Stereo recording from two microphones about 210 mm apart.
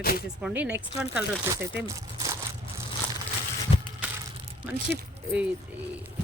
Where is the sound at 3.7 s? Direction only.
30° left (ahead or behind).